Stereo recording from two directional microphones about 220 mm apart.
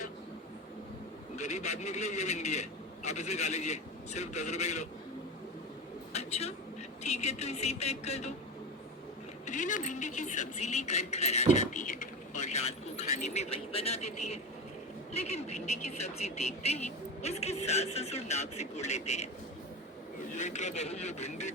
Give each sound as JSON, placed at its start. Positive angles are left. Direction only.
{"t": 1.4, "sound": "speech", "side_deg": 30}
{"t": 6.1, "sound": "speech", "side_deg": 30}
{"t": 9.5, "sound": "speech", "side_deg": 35}
{"t": 20.3, "sound": "speech", "side_deg": 35}